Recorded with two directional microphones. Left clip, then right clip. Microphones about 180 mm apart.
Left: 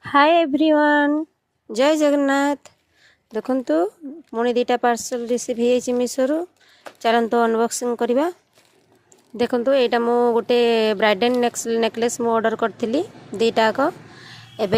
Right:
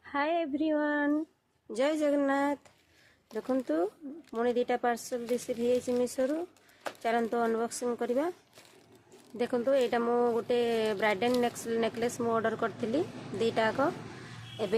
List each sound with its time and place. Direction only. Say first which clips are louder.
0.0 s speech: left 15 dB; 60° left (ahead or behind)
9.4 s speech: left 10 dB; 50° left (ahead or behind)